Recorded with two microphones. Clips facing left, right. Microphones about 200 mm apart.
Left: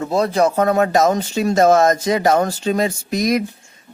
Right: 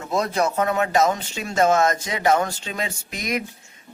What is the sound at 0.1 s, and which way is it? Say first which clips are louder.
Speech: left 5 dB; 30° left (ahead or behind).